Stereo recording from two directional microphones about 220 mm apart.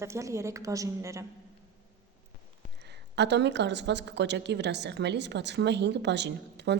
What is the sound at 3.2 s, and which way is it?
A woman's voice, 50° right (ahead or behind).